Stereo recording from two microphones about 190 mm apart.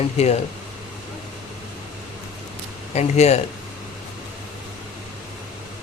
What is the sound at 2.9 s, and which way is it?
Speech, 35° left (ahead or behind).